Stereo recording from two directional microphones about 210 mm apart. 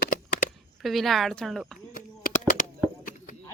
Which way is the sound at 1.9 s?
40° left (ahead or behind).